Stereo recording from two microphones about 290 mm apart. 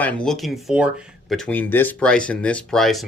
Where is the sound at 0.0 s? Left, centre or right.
Centre.